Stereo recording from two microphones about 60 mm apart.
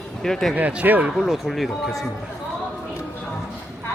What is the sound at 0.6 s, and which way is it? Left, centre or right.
Speech, right.